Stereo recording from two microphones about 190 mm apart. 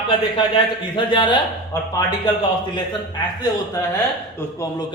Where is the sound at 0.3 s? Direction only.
25° left (ahead or behind).